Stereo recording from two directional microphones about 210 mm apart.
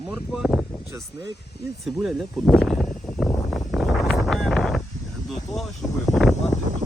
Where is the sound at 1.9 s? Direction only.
Centre (ahead or behind).